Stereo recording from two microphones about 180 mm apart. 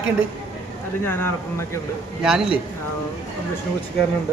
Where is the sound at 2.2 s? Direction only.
5° right (ahead or behind).